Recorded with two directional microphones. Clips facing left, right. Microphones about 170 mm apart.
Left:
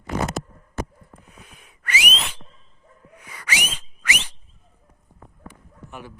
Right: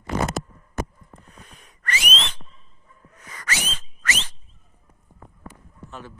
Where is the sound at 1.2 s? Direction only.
10° left (ahead or behind).